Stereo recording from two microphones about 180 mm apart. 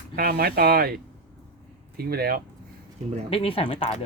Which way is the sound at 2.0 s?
60° right (ahead or behind).